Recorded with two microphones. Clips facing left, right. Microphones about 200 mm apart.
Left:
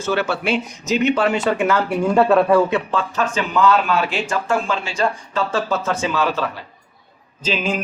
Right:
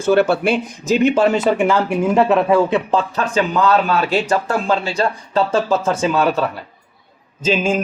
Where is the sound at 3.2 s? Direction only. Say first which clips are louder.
Right 2 dB; 35° right (ahead or behind).